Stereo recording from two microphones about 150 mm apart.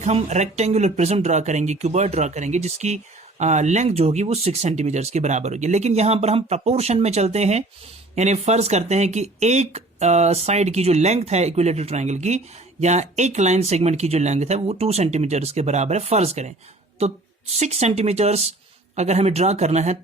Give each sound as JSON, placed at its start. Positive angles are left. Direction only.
{"t": 0.0, "sound": "speech", "side_deg": -50}